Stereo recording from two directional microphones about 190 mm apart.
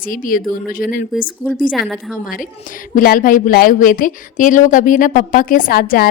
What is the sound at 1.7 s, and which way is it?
Speech, centre (ahead or behind).